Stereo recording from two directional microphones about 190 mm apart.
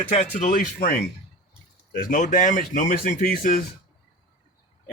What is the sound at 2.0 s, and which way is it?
Speech, 45° left (ahead or behind).